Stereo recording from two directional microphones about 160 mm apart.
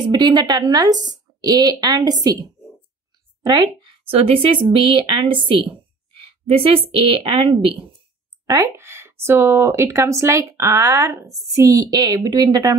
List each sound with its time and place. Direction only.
0.0 s a woman's voice: 25° right (ahead or behind)
8.5 s speech: 20° right (ahead or behind)